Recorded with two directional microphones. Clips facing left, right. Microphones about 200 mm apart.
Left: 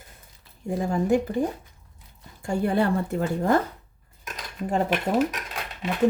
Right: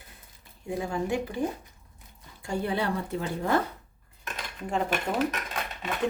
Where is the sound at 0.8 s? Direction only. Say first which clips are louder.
Left 7 dB; 40° left (ahead or behind).